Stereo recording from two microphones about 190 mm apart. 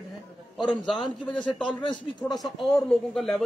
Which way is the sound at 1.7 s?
25° left (ahead or behind).